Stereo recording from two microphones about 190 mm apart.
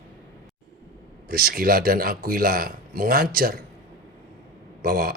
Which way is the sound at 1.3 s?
55° right (ahead or behind).